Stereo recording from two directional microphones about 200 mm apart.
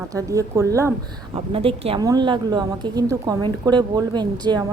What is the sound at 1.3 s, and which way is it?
A woman's voice, 30° right (ahead or behind).